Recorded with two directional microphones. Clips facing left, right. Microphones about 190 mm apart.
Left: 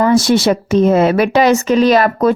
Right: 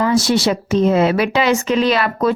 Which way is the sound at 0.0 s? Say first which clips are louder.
Left 4 dB; 50° left (ahead or behind).